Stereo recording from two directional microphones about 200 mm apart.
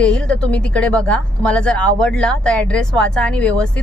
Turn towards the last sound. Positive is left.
turn(degrees=5)  # may be behind; listen again after turning